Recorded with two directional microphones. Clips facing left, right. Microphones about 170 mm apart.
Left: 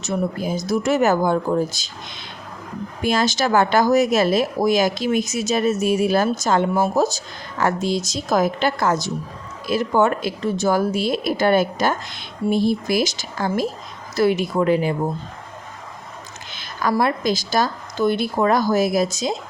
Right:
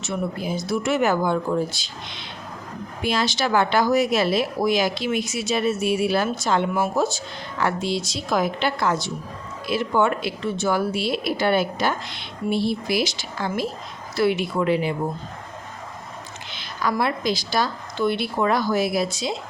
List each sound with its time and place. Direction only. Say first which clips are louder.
0.0 s speech: left 4 dB; 45° left (ahead or behind)
3.0 s speech: left 3 dB; 45° left (ahead or behind)
16.5 s a sound: left 2 dB; 45° left (ahead or behind)
17.0 s speech: left 4 dB; 45° left (ahead or behind)